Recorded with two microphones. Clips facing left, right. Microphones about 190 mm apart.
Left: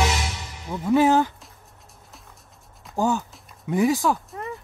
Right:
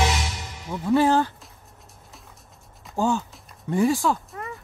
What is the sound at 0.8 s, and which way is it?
Speech, 15° left (ahead or behind).